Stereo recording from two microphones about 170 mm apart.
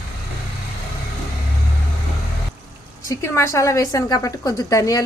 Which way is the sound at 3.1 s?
15° left (ahead or behind).